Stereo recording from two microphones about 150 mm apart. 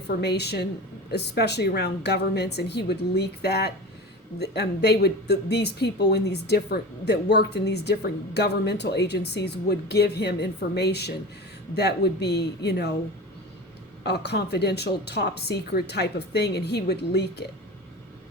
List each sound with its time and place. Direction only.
0.1 s speech: 90° left
14.0 s speech: 90° left